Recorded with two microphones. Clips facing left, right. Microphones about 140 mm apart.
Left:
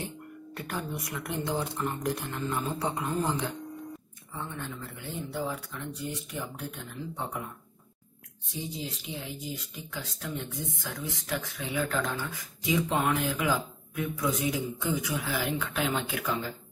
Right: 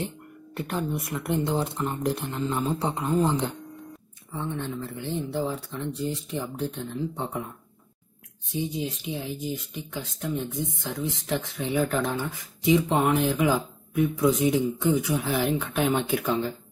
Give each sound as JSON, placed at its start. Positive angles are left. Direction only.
{"t": 0.6, "sound": "speech", "side_deg": -20}
{"t": 8.5, "sound": "speech", "side_deg": -20}